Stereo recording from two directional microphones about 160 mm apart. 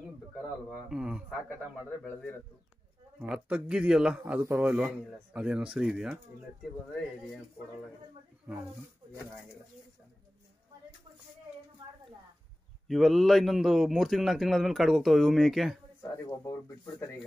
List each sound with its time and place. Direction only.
0.4 s a man's voice: centre (ahead or behind)
3.2 s a man's voice: 5° right (ahead or behind)
12.8 s a man's voice: centre (ahead or behind)
16.0 s speech: 20° left (ahead or behind)